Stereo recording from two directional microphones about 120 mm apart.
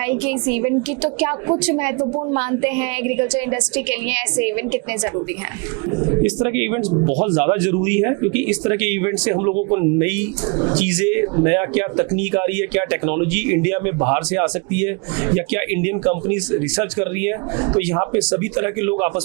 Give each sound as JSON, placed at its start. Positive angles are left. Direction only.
{"t": 0.0, "sound": "speech", "side_deg": -20}
{"t": 6.0, "sound": "speech", "side_deg": -25}